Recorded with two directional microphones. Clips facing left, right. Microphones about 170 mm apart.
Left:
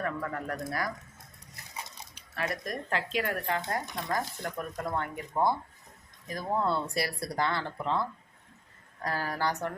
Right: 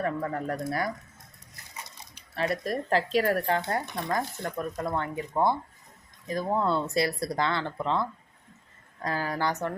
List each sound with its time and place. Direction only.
0.0 s speech: 30° right (ahead or behind)
2.3 s speech: 30° right (ahead or behind)
4.1 s speech: 25° right (ahead or behind)
9.0 s speech: 20° right (ahead or behind)